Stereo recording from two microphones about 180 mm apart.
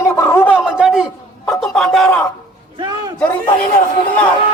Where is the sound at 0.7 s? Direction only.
5° right (ahead or behind).